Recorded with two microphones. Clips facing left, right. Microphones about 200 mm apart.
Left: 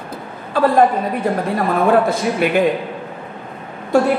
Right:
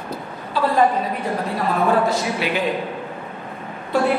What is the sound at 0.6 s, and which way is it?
Speech, 50° left (ahead or behind).